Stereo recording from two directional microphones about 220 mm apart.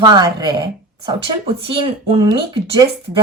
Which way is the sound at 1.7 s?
25° right (ahead or behind).